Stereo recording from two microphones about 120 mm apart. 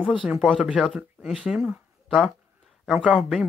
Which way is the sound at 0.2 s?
10° right (ahead or behind).